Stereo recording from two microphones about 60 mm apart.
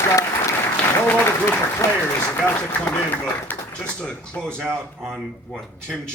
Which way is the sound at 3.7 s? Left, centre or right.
Centre.